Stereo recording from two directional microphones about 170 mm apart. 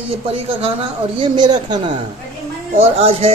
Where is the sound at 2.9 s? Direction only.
35° right (ahead or behind).